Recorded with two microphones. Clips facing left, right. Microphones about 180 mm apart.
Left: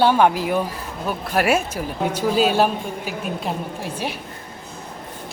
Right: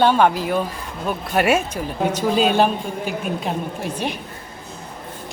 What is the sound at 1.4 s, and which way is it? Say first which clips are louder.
Speech: right 1 dB; centre (ahead or behind).